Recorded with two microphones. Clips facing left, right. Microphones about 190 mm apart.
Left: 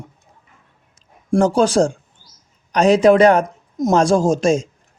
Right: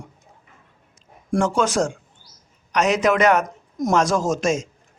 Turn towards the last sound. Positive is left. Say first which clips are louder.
# left 5 dB
turn(degrees=30)  # may be behind; listen again after turning